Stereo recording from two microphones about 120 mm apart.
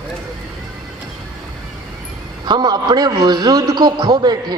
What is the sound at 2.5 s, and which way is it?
A man's voice, 35° right (ahead or behind).